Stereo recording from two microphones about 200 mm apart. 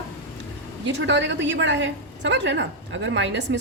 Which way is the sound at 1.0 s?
65° right (ahead or behind).